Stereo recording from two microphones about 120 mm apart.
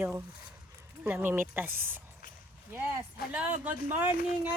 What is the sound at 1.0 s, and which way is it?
Speech, 15° right (ahead or behind).